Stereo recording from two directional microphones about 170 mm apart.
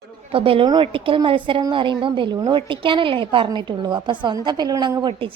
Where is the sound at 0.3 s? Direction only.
30° right (ahead or behind).